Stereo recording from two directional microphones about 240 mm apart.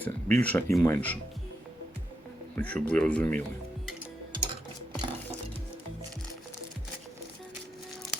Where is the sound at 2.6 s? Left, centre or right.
Centre.